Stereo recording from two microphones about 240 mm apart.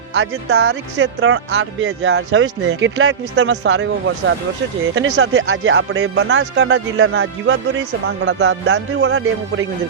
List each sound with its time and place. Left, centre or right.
0.2 s speech: right